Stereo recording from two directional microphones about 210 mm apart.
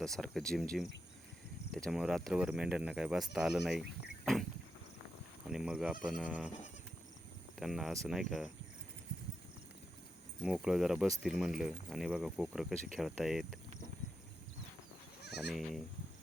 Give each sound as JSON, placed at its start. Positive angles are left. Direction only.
{"t": 0.0, "sound": "speech", "side_deg": 0}
{"t": 1.7, "sound": "speech", "side_deg": 0}
{"t": 5.5, "sound": "speech", "side_deg": -5}
{"t": 7.6, "sound": "speech", "side_deg": 0}
{"t": 10.4, "sound": "speech", "side_deg": -5}
{"t": 15.4, "sound": "speech", "side_deg": 0}